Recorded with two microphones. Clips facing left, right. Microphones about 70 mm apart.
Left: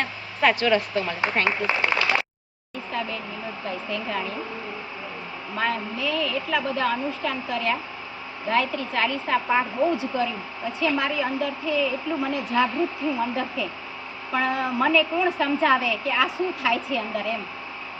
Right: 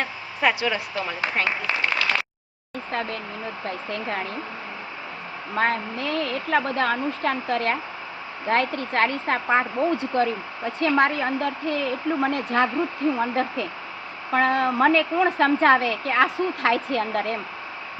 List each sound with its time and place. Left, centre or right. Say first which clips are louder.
0.0 s speech: left 1 dB; centre
1.5 s a sound: left 2 dB; left
2.9 s a woman's voice: right 1 dB; right
5.5 s a woman's voice: right 3 dB; right
14.3 s a woman's voice: right 4 dB; right